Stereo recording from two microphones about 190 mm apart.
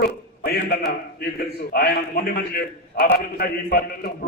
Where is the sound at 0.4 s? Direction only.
55° left (ahead or behind).